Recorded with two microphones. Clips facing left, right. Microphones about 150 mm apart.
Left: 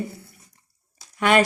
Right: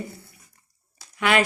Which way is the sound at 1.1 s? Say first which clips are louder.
Left 3 dB; 40° left (ahead or behind).